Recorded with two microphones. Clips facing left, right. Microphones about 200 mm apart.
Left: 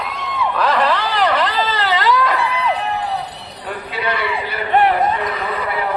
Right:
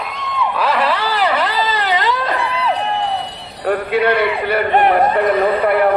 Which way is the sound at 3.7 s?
60° right (ahead or behind).